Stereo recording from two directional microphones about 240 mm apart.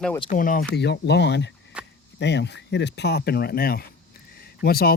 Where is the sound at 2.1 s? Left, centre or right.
Left.